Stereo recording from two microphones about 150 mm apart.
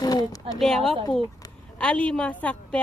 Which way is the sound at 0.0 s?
25° left (ahead or behind).